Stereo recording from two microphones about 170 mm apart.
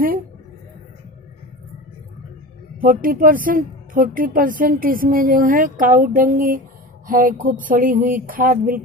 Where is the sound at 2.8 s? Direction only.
55° right (ahead or behind).